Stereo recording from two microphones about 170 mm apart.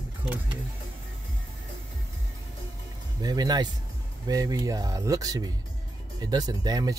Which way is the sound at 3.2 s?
20° right (ahead or behind).